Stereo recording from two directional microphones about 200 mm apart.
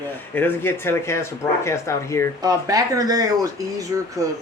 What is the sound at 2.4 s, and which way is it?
Speech, 15° right (ahead or behind).